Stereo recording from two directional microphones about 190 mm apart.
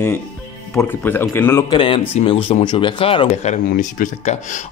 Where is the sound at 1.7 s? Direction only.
25° left (ahead or behind).